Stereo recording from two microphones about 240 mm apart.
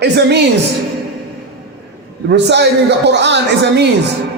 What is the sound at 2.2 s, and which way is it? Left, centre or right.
A man's voice, right.